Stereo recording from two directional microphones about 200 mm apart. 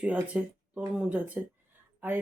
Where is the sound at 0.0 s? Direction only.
5° right (ahead or behind).